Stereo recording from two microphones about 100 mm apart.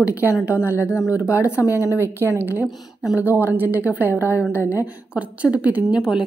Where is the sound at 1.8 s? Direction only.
25° right (ahead or behind).